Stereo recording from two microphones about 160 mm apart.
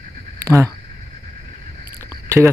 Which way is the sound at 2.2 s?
15° right (ahead or behind).